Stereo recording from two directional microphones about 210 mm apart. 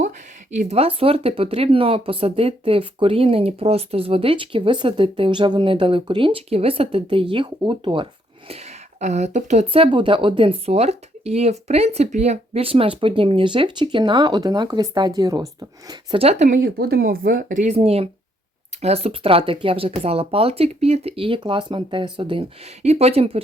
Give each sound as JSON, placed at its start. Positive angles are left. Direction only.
{"t": 0.5, "sound": "speech", "side_deg": -35}
{"t": 16.6, "sound": "speech", "side_deg": -50}